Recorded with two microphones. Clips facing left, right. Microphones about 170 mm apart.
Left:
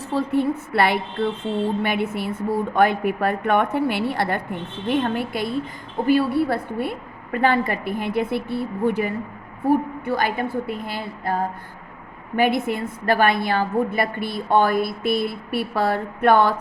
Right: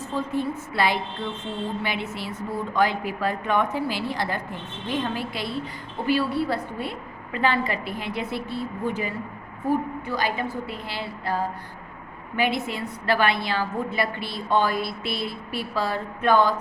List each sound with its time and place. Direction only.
0.1 s a sound: 70° left (ahead or behind)
1.8 s a woman's voice: 55° left (ahead or behind)
12.4 s a woman's voice: 55° left (ahead or behind)